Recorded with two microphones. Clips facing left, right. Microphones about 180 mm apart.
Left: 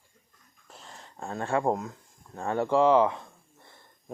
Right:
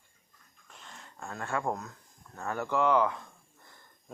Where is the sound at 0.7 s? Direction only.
35° left (ahead or behind).